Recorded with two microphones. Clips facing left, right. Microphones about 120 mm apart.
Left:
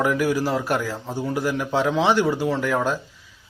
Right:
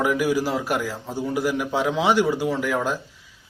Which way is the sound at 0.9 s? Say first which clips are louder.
Even; 15° left (ahead or behind).